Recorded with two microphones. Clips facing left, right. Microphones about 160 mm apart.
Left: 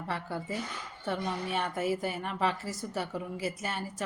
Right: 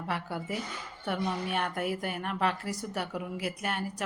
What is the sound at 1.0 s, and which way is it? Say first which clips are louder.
A woman's voice: right 1 dB; centre (ahead or behind).